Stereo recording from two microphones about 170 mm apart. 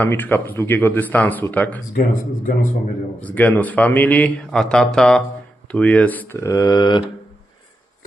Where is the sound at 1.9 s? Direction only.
55° left (ahead or behind).